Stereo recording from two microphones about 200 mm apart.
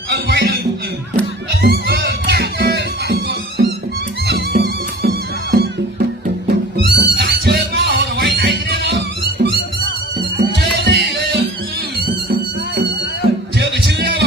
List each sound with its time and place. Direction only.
0.1 s music: 50° right (ahead or behind)